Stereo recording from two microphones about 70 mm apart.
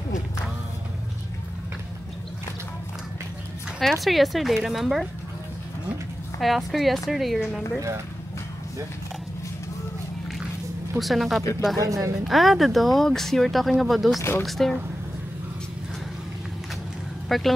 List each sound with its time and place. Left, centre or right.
3.8 s speech: centre
6.4 s speech: centre
11.0 s speech: centre
11.7 s speech: right
12.3 s speech: centre
17.3 s speech: centre